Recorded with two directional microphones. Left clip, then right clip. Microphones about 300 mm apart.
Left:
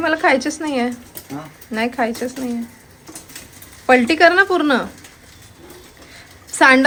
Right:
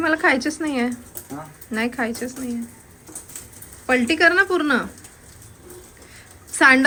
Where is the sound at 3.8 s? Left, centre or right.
Centre.